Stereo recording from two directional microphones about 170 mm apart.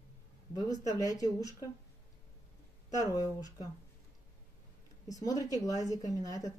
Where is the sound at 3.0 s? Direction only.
20° left (ahead or behind).